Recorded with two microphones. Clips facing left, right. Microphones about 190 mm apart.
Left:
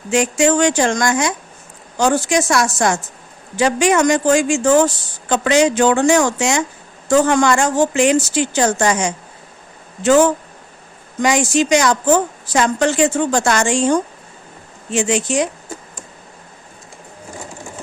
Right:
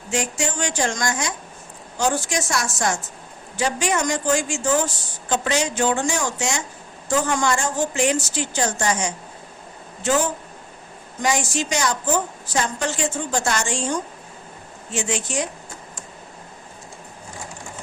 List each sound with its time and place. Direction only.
0.1 s a woman's voice: 90° left